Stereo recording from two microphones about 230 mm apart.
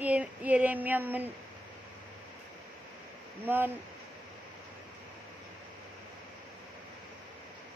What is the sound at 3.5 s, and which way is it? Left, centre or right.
Speech, centre.